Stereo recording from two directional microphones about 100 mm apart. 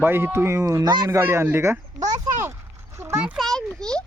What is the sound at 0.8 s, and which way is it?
Speech, 45° right (ahead or behind).